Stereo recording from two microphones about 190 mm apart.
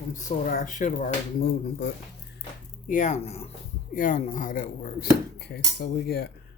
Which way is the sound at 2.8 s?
40° left (ahead or behind).